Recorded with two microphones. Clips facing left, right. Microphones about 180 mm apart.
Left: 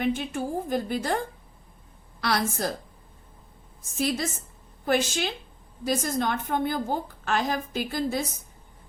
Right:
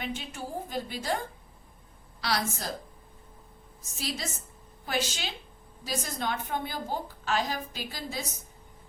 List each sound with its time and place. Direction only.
0.0 s a woman's voice: 50° left (ahead or behind)
2.2 s a woman's voice: 55° left (ahead or behind)
3.9 s a woman's voice: 50° left (ahead or behind)